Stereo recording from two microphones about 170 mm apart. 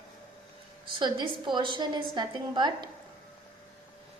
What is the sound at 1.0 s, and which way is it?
A woman's voice, 25° right (ahead or behind).